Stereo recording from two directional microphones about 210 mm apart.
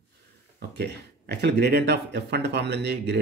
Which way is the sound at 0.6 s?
50° right (ahead or behind).